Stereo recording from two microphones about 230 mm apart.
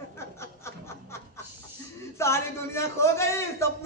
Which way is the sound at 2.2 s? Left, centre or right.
Centre.